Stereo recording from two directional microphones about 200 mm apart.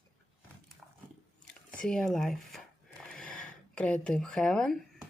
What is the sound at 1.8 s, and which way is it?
Speech, 5° left (ahead or behind).